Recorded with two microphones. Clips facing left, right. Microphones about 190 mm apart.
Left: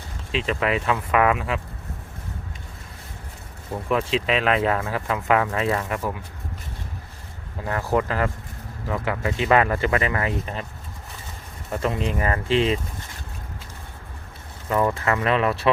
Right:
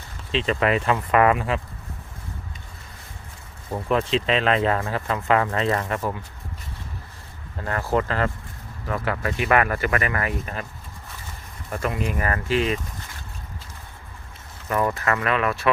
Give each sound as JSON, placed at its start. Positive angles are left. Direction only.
{"t": 0.3, "sound": "speech", "side_deg": 5}
{"t": 3.9, "sound": "speech", "side_deg": 5}
{"t": 7.6, "sound": "speech", "side_deg": 15}
{"t": 11.7, "sound": "speech", "side_deg": 25}
{"t": 14.9, "sound": "speech", "side_deg": 25}